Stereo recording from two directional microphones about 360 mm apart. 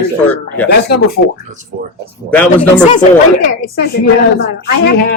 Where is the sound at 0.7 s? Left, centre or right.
Left.